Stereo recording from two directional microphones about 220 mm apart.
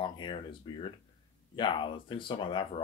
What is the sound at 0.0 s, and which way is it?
Speech, 20° left (ahead or behind).